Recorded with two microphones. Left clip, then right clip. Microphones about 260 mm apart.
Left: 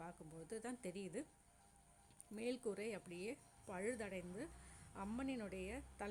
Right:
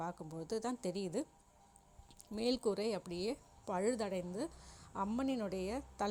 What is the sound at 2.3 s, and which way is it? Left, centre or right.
A woman's voice, centre.